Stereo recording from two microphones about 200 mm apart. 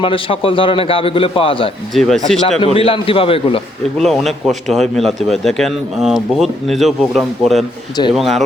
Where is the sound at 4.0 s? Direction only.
Centre (ahead or behind).